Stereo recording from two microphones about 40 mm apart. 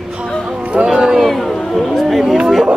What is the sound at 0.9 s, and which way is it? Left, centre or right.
Speech, right.